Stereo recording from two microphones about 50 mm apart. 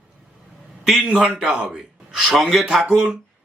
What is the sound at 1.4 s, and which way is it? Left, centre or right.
Speech, centre.